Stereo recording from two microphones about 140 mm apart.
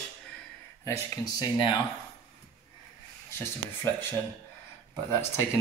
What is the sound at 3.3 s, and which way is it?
Speech, 15° left (ahead or behind).